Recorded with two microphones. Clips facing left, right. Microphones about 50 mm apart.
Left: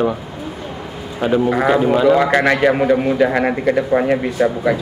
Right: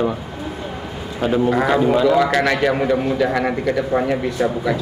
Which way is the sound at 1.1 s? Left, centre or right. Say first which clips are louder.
Left 1 dB; centre.